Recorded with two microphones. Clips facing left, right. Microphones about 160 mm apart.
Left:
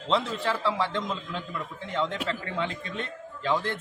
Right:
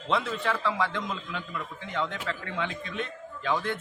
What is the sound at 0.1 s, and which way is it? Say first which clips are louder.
A man's voice: left 1 dB; 30° left (ahead or behind).